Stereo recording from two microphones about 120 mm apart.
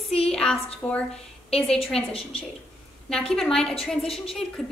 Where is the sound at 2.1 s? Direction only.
55° left (ahead or behind).